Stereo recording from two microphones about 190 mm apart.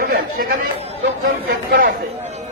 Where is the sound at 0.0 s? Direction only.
50° right (ahead or behind).